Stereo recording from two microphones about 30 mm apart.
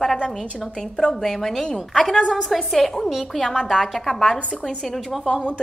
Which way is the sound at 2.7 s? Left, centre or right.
Centre.